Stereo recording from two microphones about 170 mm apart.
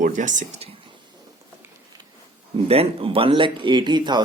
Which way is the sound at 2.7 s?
35° right (ahead or behind).